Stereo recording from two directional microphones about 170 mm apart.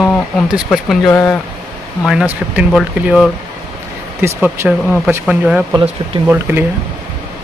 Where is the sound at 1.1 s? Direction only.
10° left (ahead or behind).